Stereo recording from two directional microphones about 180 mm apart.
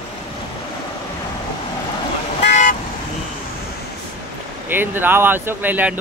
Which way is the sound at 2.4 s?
45° left (ahead or behind).